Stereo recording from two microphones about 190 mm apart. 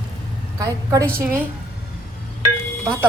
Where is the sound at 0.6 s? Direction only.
15° right (ahead or behind).